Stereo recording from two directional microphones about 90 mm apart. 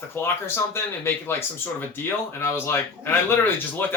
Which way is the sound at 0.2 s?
25° left (ahead or behind).